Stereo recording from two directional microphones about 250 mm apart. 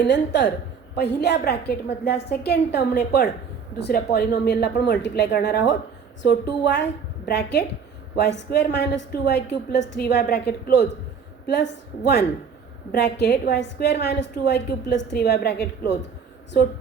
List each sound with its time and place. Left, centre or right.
0.0 s a woman's voice: left
12.9 s a woman's voice: left